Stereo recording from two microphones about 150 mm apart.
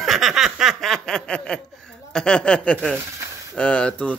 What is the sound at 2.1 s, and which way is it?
Speech, 5° left (ahead or behind).